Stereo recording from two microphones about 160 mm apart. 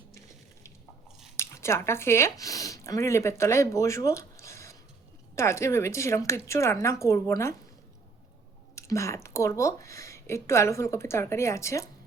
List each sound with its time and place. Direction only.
1.4 s speech: 15° left (ahead or behind)
8.7 s speech: 20° left (ahead or behind)